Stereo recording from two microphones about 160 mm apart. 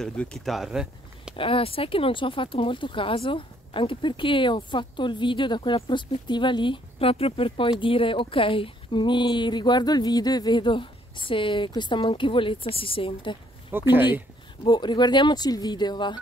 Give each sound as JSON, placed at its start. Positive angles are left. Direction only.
{"t": 0.0, "sound": "speech", "side_deg": 5}
{"t": 1.3, "sound": "speech", "side_deg": 35}
{"t": 13.9, "sound": "speech", "side_deg": -10}
{"t": 14.6, "sound": "speech", "side_deg": 30}